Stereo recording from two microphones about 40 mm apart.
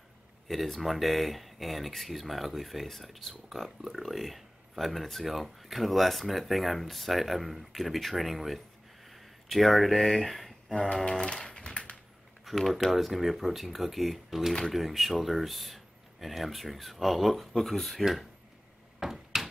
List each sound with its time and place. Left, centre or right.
0.5 s speech: centre
10.7 s speech: centre
11.3 s typewriter: centre
12.4 s speech: centre
18.9 s a sound: centre